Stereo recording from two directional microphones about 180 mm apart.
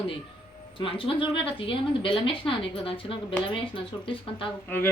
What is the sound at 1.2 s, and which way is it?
A woman's voice, 30° left (ahead or behind).